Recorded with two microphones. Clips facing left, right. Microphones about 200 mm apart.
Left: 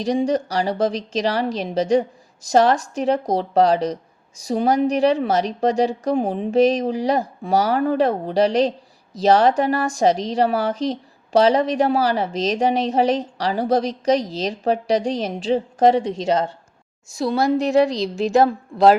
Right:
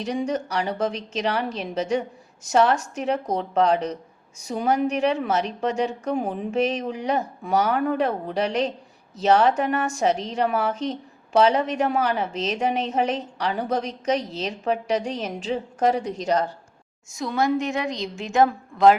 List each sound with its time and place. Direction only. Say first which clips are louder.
0.0 s a woman's voice: left 6 dB; 35° left (ahead or behind)